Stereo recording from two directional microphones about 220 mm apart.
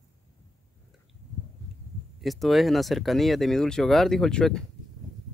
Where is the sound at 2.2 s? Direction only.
Centre (ahead or behind).